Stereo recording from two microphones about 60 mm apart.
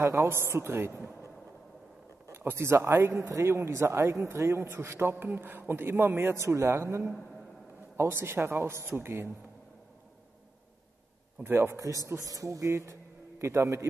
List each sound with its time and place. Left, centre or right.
0.0 s a man's voice: right
2.3 s a man's voice: right
11.4 s a man's voice: right
12.2 s a man's voice: right